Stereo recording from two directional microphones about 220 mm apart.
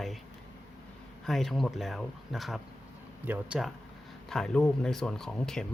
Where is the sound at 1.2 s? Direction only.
Centre (ahead or behind).